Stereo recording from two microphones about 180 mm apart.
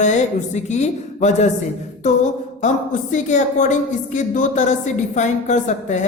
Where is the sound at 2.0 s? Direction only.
40° left (ahead or behind).